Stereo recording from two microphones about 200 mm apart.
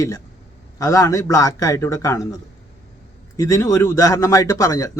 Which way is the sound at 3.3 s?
15° left (ahead or behind).